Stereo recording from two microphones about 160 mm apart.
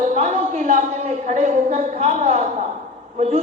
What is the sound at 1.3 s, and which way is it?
A woman's voice, 50° right (ahead or behind).